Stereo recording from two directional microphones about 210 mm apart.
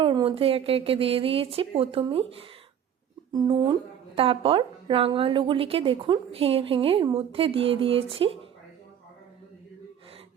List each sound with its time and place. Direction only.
0.0 s a woman's voice: 20° right (ahead or behind)